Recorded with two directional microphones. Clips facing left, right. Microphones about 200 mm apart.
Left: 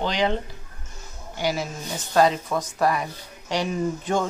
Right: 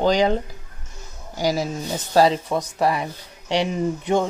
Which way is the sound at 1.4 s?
40° right (ahead or behind).